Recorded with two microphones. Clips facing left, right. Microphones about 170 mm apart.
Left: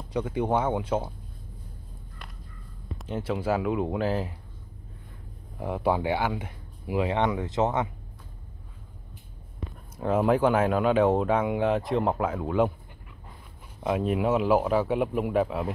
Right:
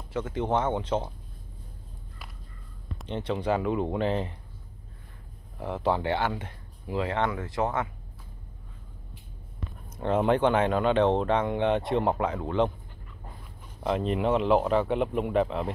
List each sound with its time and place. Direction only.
0.1 s speech: 10° left (ahead or behind)
3.0 s speech: 5° left (ahead or behind)
5.6 s speech: 10° left (ahead or behind)
9.9 s speech: 5° left (ahead or behind)
13.8 s speech: 5° left (ahead or behind)